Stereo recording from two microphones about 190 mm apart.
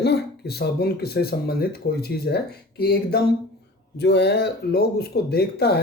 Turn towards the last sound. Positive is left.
turn(degrees=60)  # may be behind; listen again after turning